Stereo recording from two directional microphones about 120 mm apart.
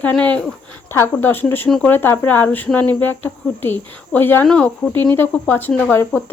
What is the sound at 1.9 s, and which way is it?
Speech, 15° left (ahead or behind).